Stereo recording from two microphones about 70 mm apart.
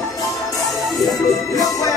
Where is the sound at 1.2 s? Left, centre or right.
Left.